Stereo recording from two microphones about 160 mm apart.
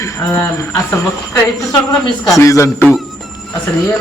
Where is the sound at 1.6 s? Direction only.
20° left (ahead or behind).